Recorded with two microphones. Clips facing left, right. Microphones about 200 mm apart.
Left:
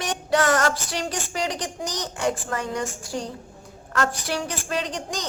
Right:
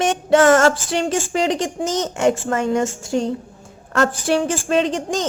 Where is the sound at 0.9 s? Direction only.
25° right (ahead or behind).